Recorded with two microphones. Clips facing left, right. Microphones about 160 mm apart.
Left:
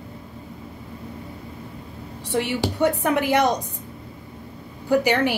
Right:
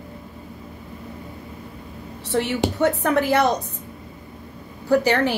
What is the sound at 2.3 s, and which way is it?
A woman's voice, 15° left (ahead or behind).